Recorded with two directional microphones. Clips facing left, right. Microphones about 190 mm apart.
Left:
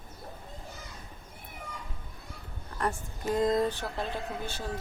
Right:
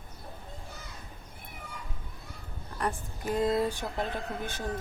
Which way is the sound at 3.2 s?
5° right (ahead or behind).